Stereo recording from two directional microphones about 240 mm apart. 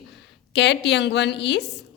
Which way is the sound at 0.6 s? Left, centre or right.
Left.